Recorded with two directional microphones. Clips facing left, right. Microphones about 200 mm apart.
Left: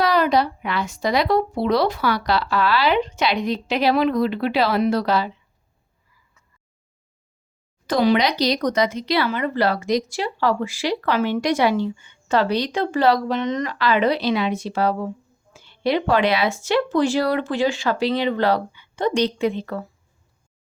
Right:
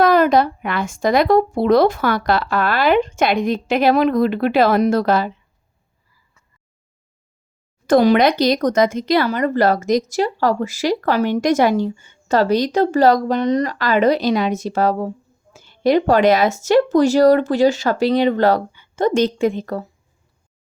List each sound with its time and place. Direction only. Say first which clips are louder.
0.0 s speech: right 5 dB; 50° right (ahead or behind)
7.9 s speech: right 5 dB; 50° right (ahead or behind)